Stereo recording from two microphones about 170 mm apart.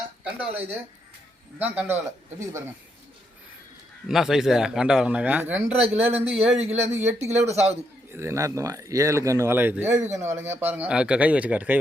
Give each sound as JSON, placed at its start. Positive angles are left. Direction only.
{"t": 0.3, "sound": "speech", "side_deg": -10}
{"t": 4.1, "sound": "a man's voice", "side_deg": 0}
{"t": 6.7, "sound": "speech", "side_deg": -15}
{"t": 7.3, "sound": "speech", "side_deg": -40}
{"t": 8.1, "sound": "speech", "side_deg": -15}